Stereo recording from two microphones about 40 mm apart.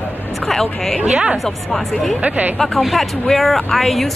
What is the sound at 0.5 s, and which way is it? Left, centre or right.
Speech, centre.